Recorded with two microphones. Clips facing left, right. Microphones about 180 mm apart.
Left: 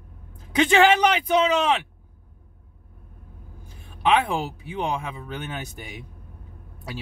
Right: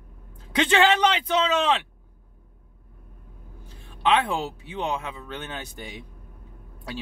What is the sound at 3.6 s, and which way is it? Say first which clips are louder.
A man's voice: left 1 dB; 10° left (ahead or behind).